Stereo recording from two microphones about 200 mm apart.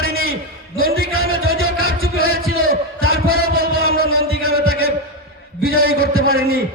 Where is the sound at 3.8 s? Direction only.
50° left (ahead or behind).